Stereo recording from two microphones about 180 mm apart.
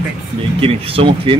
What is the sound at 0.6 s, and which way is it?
Speech, 30° right (ahead or behind).